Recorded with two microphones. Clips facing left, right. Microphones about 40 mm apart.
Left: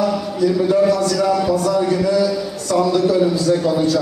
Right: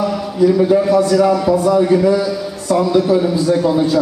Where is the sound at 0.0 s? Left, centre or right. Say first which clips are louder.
Right 3 dB; centre.